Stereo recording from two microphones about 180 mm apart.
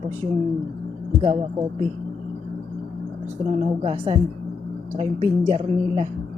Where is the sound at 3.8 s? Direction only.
30° right (ahead or behind).